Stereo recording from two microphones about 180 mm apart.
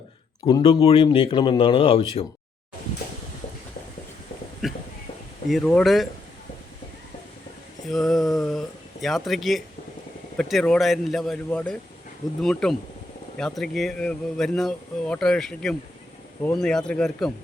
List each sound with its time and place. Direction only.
0.4 s speech: 25° left (ahead or behind)
4.6 s speech: centre (ahead or behind)
7.9 s speech: centre (ahead or behind)